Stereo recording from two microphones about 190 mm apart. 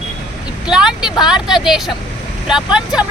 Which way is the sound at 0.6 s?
5° right (ahead or behind).